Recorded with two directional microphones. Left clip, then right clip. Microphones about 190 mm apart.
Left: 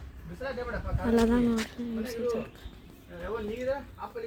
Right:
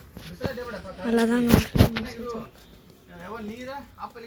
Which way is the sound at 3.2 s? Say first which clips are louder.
Left 5 dB; 5° left (ahead or behind).